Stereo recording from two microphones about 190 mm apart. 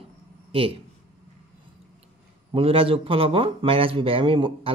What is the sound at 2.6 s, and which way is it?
Speech, 30° right (ahead or behind).